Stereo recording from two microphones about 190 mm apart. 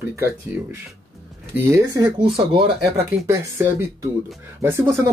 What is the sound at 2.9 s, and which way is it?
Speech, 15° right (ahead or behind).